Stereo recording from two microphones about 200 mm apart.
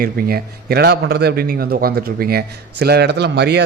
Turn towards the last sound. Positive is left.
turn(degrees=-55)  # may be behind; listen again after turning